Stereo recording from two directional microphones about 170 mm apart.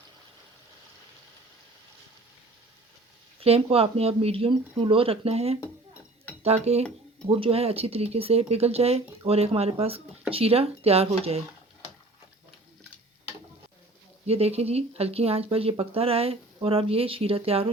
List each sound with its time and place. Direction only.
3.4 s speech: 35° right (ahead or behind)
14.3 s speech: 35° right (ahead or behind)